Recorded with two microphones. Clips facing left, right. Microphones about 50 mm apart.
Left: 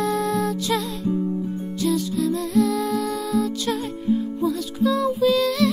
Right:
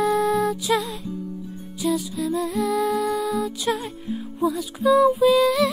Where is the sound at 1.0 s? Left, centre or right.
Left.